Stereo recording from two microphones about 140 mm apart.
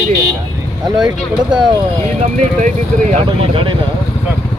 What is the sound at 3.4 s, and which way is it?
Speech, 40° right (ahead or behind).